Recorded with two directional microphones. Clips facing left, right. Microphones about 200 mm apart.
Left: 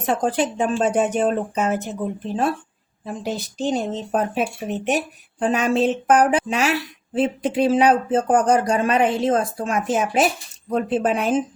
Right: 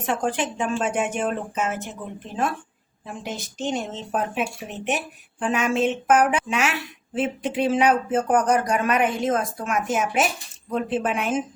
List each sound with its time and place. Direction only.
0.0 s speech: 35° left (ahead or behind)